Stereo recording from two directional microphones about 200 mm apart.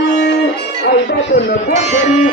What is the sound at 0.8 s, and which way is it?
Speech, 55° left (ahead or behind).